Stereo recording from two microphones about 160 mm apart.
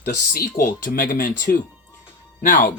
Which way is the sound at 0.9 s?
60° left (ahead or behind).